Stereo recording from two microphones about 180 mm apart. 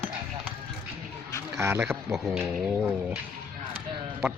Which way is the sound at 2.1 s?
Centre (ahead or behind).